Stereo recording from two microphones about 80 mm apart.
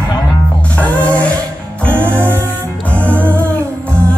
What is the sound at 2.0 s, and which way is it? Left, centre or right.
Music, right.